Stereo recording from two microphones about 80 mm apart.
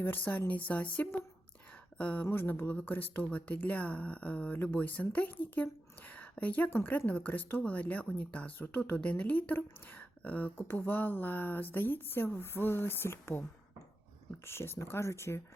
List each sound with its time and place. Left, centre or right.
0.0 s speech: left
1.7 s a sound: centre
2.2 s speech: left
14.4 s speech: left